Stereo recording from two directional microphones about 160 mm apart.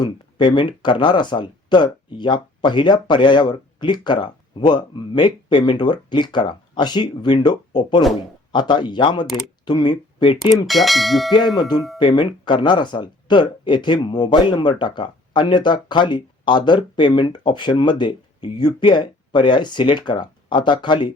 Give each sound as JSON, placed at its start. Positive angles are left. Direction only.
{"t": 0.0, "sound": "speech", "side_deg": 30}
{"t": 10.7, "sound": "speech", "side_deg": 0}
{"t": 11.9, "sound": "speech", "side_deg": 30}